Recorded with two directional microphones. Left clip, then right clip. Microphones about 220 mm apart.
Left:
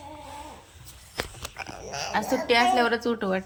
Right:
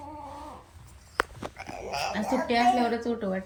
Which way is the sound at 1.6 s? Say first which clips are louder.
Right 3 dB; 30° left (ahead or behind).